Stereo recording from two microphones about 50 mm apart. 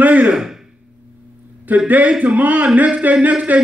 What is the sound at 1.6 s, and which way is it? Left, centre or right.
Speech, right.